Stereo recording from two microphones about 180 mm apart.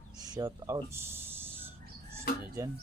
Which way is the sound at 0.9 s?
15° right (ahead or behind).